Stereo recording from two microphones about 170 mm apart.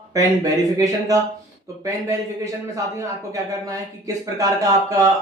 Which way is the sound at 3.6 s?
20° right (ahead or behind).